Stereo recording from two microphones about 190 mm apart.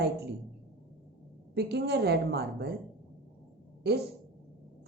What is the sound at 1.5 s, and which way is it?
Speech, 60° right (ahead or behind).